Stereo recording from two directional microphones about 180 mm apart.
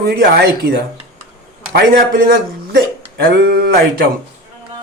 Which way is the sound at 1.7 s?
55° right (ahead or behind).